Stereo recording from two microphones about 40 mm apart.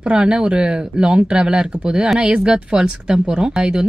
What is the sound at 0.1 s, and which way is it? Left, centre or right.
Speech, right.